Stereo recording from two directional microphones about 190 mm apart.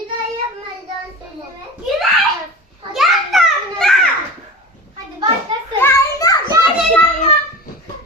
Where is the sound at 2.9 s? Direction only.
Centre (ahead or behind).